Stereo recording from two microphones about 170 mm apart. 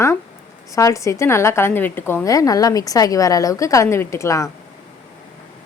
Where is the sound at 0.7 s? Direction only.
20° left (ahead or behind).